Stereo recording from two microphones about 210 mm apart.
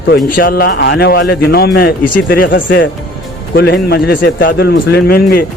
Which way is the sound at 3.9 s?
45° left (ahead or behind).